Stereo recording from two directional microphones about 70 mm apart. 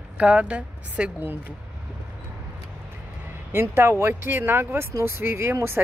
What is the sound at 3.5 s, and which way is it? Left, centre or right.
Speech, right.